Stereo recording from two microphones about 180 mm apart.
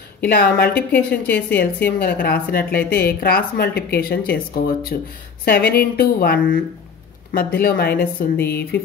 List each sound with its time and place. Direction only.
0.4 s a woman's voice: 60° left (ahead or behind)